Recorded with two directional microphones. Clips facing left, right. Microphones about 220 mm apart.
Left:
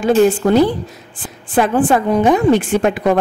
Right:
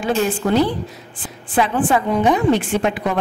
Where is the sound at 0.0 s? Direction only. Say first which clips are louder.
Left 7 dB; 45° left (ahead or behind).